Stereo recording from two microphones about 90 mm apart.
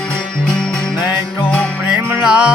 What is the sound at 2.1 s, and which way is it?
Music, 15° right (ahead or behind).